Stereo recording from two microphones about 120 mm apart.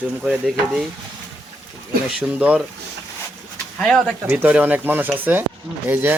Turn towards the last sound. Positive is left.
turn(degrees=-15)  # may be behind; listen again after turning